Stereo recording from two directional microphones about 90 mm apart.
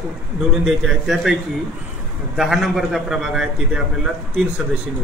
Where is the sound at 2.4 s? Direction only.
5° right (ahead or behind).